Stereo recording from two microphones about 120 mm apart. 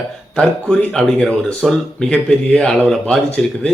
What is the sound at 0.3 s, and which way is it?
Speech, 5° left (ahead or behind).